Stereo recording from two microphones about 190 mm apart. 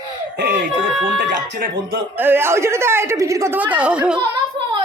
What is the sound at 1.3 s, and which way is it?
Speech, 45° right (ahead or behind).